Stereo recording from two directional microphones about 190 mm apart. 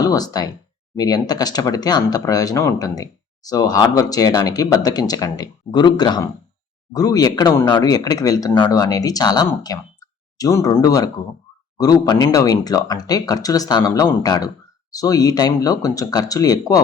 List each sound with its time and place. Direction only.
0.0 s speech: 20° left (ahead or behind)